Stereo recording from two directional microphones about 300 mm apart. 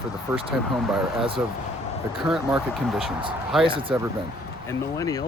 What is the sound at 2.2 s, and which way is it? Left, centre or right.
Speech, centre.